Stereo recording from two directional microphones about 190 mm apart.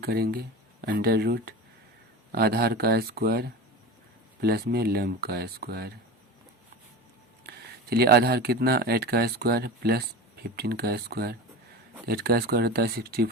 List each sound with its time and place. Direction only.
0.0 s speech: 55° right (ahead or behind)
7.4 s speech: 55° right (ahead or behind)